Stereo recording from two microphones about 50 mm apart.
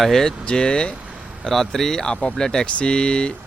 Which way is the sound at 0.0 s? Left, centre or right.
Centre.